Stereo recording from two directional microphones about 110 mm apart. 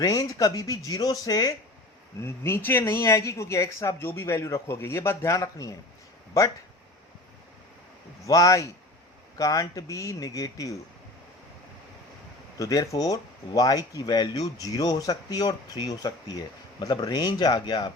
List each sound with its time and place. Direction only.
0.0 s speech: 30° left (ahead or behind)
2.2 s speech: 25° left (ahead or behind)
8.3 s speech: 30° left (ahead or behind)
12.5 s speech: 30° left (ahead or behind)